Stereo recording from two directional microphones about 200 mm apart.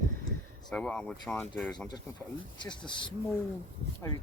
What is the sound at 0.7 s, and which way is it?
Speech, 5° left (ahead or behind).